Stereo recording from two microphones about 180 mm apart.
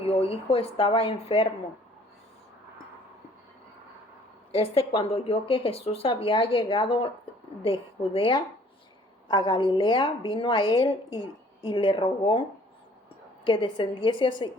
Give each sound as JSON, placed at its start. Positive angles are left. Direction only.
{"t": 0.0, "sound": "speech", "side_deg": 30}
{"t": 4.5, "sound": "a woman's voice", "side_deg": 30}
{"t": 13.4, "sound": "a woman's voice", "side_deg": 25}